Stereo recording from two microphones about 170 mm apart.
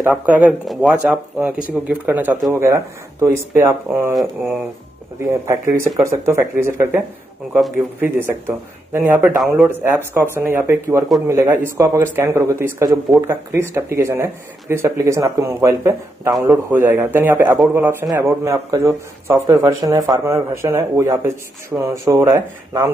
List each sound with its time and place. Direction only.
0.0 s a man's voice: 10° right (ahead or behind)
4.1 s speech: centre (ahead or behind)
5.2 s a man's voice: 15° right (ahead or behind)
8.0 s a man's voice: 10° right (ahead or behind)